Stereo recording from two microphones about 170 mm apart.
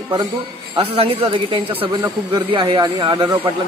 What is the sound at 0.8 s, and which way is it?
A man's voice, 35° right (ahead or behind).